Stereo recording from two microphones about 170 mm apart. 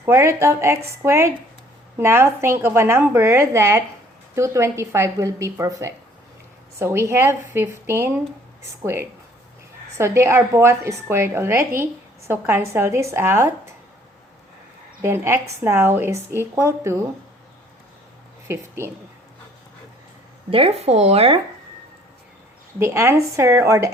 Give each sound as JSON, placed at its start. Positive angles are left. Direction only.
{"t": 0.0, "sound": "a woman's voice", "side_deg": -15}
{"t": 15.0, "sound": "a woman's voice", "side_deg": -15}
{"t": 18.4, "sound": "a woman's voice", "side_deg": -15}
{"t": 20.5, "sound": "speech", "side_deg": -35}
{"t": 22.8, "sound": "a woman's voice", "side_deg": -15}